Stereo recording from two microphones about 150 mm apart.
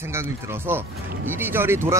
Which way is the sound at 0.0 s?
15° right (ahead or behind).